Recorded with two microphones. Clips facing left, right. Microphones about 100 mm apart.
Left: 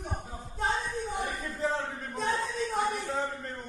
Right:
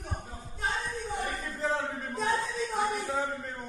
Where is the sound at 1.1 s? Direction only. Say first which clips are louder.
Right 3 dB; 15° left (ahead or behind).